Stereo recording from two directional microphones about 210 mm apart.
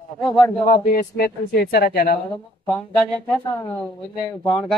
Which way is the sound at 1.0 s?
50° left (ahead or behind).